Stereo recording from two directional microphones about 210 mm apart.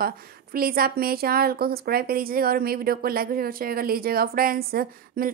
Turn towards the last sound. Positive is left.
turn(degrees=-45)  # may be behind; listen again after turning